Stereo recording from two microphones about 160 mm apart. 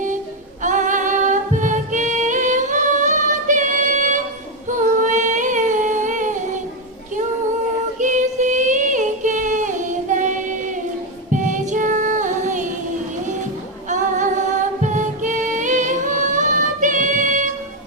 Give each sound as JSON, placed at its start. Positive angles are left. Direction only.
{"t": 0.6, "sound": "singing", "side_deg": -50}
{"t": 4.7, "sound": "humming", "side_deg": -55}
{"t": 7.9, "sound": "child singing", "side_deg": -50}
{"t": 11.3, "sound": "music", "side_deg": -50}
{"t": 13.9, "sound": "music", "side_deg": -50}